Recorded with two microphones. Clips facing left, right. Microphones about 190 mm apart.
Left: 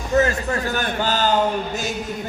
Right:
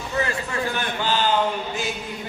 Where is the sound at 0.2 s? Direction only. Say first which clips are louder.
Left 5 dB; 40° left (ahead or behind).